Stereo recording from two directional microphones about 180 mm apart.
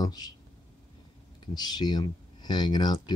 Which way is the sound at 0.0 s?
20° left (ahead or behind).